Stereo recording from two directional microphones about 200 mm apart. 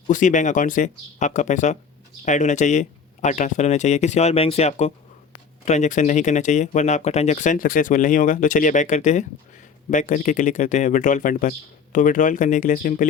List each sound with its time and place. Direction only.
0.1 s speech: 40° left (ahead or behind)